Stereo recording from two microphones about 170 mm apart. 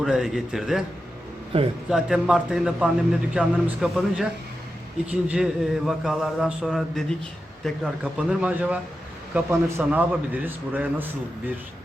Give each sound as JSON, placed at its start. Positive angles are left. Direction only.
{"t": 0.0, "sound": "speech", "side_deg": 0}
{"t": 1.5, "sound": "a man's voice", "side_deg": -35}
{"t": 1.9, "sound": "speech", "side_deg": -5}
{"t": 5.3, "sound": "a man's voice", "side_deg": 0}